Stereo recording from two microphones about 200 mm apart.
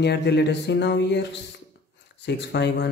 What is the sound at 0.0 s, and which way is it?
Speech, 55° left (ahead or behind).